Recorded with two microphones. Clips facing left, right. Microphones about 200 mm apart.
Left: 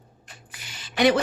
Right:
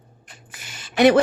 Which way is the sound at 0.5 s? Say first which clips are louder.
Right 5 dB; 50° right (ahead or behind).